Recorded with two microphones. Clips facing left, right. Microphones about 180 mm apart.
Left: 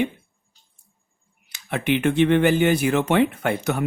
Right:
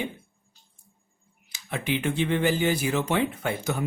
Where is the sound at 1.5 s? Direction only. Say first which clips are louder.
Left 6 dB; 65° left (ahead or behind).